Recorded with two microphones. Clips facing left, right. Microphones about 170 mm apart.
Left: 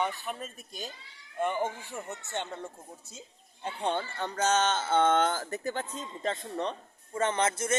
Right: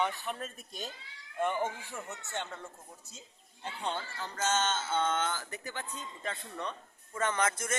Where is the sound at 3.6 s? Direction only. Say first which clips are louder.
Left 6 dB; 55° left (ahead or behind); by 7.8 s 25° left (ahead or behind).